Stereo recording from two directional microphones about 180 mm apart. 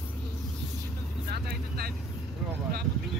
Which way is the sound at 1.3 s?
60° right (ahead or behind).